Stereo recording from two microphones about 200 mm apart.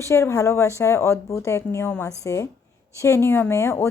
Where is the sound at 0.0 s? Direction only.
15° left (ahead or behind).